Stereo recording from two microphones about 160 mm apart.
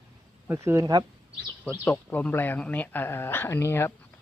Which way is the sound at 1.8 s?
10° left (ahead or behind).